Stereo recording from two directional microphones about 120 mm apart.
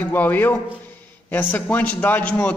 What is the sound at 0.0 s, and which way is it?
A man's voice, 15° left (ahead or behind).